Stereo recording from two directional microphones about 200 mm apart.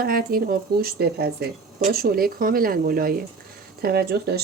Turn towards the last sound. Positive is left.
turn(degrees=-50)  # may be behind; listen again after turning